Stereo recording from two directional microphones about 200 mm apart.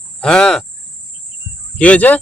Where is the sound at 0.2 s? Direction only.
5° left (ahead or behind).